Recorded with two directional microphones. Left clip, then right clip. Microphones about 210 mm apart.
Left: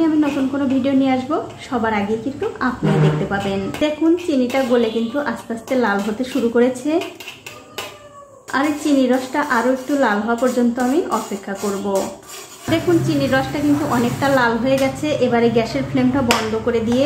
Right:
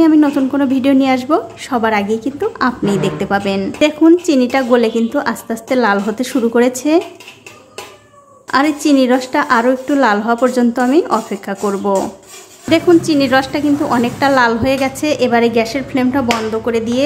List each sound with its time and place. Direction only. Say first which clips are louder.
0.0 s a woman's voice: right 6 dB; 35° right (ahead or behind)
8.5 s a woman's voice: right 6 dB; 35° right (ahead or behind)